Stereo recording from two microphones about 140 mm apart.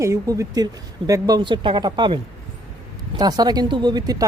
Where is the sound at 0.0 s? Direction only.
20° right (ahead or behind).